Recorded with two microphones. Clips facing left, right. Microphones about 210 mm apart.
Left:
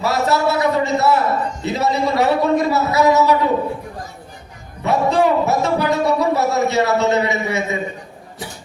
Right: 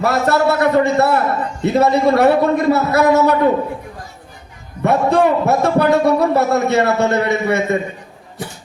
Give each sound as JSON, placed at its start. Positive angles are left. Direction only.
{"t": 0.0, "sound": "a man's voice", "side_deg": -55}
{"t": 4.8, "sound": "a man's voice", "side_deg": -55}